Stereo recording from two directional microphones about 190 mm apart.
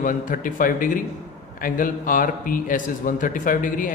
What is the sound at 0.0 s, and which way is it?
A man's voice, 45° left (ahead or behind).